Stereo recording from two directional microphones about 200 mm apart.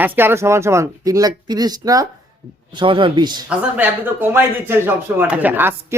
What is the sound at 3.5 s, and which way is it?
Speech, 10° right (ahead or behind).